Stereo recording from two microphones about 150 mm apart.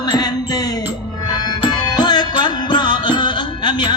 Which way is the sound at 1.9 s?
30° left (ahead or behind).